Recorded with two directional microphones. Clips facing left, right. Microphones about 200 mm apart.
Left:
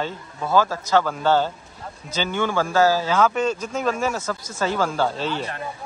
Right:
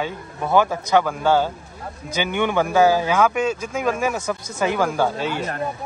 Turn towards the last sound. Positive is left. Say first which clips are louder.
# right 2 dB
turn(degrees=-10)  # may be behind; listen again after turning